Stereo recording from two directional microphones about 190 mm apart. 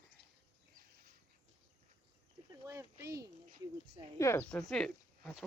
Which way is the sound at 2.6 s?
15° right (ahead or behind).